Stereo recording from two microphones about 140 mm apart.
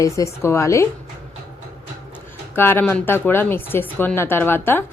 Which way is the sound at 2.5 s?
15° left (ahead or behind).